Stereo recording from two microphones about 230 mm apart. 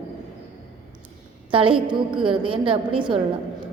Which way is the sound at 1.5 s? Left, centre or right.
Right.